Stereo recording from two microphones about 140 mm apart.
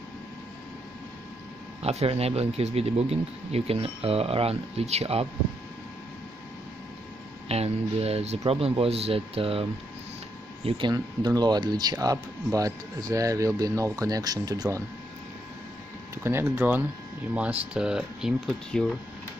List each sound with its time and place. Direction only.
1.8 s speech: 50° right (ahead or behind)
7.4 s speech: 45° right (ahead or behind)
10.9 s speech: 30° right (ahead or behind)
16.2 s speech: 15° right (ahead or behind); by 18.9 s centre (ahead or behind)